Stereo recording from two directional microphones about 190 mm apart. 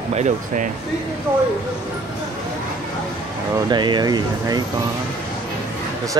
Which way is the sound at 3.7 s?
25° right (ahead or behind).